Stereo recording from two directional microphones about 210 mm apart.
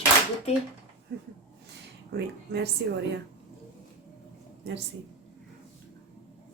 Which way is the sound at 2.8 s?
55° right (ahead or behind).